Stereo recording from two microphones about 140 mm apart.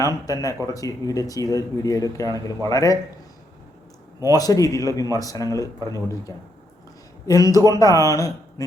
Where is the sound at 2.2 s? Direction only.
25° right (ahead or behind).